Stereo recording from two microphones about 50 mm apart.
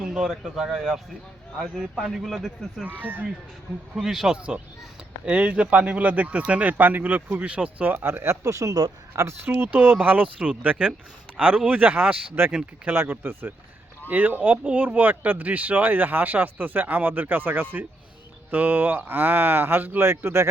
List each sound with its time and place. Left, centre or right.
0.0 s a man's voice: centre
2.8 s speech: right
3.9 s a man's voice: centre
4.4 s speech: right
7.9 s speech: right
8.4 s speech: right
9.4 s speech: right
12.5 s speech: right
13.1 s speech: right
20.1 s speech: right